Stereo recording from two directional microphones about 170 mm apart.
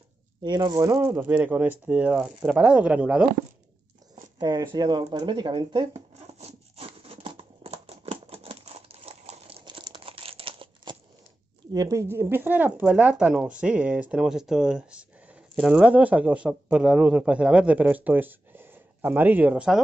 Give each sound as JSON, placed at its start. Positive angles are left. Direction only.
{"t": 0.4, "sound": "speech", "side_deg": -25}
{"t": 4.1, "sound": "zipper", "side_deg": -25}
{"t": 4.7, "sound": "shuffling cards", "side_deg": -25}
{"t": 11.7, "sound": "speech", "side_deg": -20}